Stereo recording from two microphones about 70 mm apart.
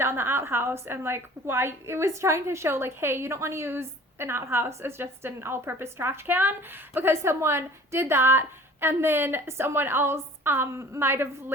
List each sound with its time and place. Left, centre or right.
0.0 s a woman's voice: right